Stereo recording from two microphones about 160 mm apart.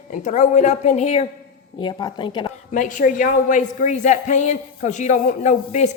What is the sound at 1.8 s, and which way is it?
Speech, 25° left (ahead or behind).